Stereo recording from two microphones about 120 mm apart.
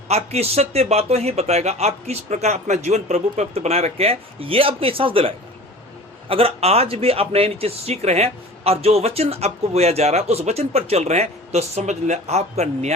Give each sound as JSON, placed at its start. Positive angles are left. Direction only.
{"t": 0.1, "sound": "speech", "side_deg": -60}